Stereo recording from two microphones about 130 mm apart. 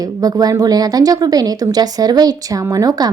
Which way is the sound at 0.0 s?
30° right (ahead or behind).